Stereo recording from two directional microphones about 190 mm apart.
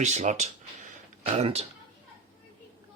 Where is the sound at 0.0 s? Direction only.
35° right (ahead or behind).